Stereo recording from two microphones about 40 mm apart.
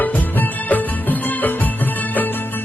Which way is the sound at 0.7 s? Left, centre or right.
Left.